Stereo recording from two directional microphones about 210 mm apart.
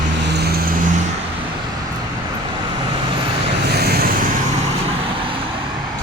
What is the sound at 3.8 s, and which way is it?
Vehicle, 50° right (ahead or behind).